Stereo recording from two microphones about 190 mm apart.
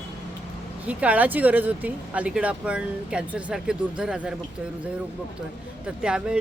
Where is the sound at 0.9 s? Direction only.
10° right (ahead or behind).